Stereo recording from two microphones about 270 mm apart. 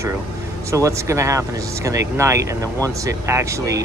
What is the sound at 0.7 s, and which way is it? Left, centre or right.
Speech, centre.